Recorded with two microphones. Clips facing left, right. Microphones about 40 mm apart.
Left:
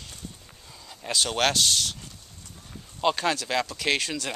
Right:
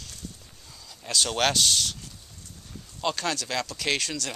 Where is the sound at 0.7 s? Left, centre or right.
Left.